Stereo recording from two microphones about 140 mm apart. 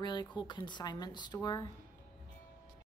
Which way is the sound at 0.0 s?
30° left (ahead or behind).